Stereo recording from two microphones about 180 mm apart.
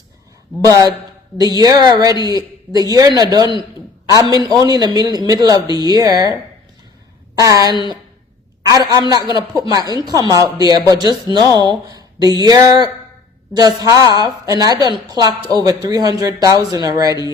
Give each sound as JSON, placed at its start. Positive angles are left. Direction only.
{"t": 0.6, "sound": "speech", "side_deg": -20}
{"t": 7.3, "sound": "speech", "side_deg": -20}